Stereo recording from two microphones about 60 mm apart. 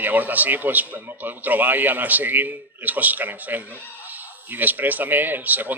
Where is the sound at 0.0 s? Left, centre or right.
Right.